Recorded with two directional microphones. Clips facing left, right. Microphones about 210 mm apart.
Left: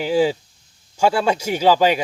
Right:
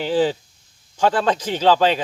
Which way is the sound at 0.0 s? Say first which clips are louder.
Left 1 dB; 10° left (ahead or behind).